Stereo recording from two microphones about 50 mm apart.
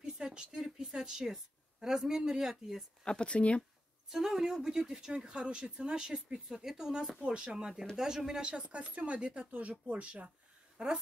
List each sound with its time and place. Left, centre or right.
0.0 s a sound: centre
0.8 s speech: centre
3.0 s speech: centre
4.1 s speech: centre
7.5 s speech: centre